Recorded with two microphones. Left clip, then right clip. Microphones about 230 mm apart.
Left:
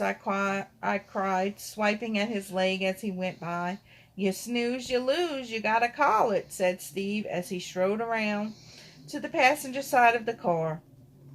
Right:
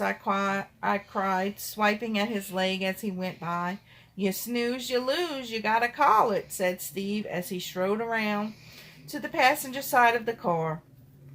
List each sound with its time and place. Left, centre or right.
0.0 s speech: centre